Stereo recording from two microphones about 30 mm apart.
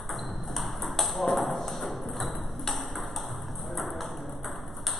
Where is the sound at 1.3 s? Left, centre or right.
Centre.